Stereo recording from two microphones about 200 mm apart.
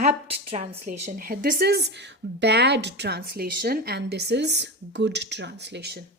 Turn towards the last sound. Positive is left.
turn(degrees=-55)  # may be behind; listen again after turning